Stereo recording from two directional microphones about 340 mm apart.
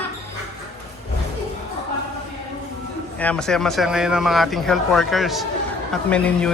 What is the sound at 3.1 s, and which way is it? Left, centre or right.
A man's voice, centre.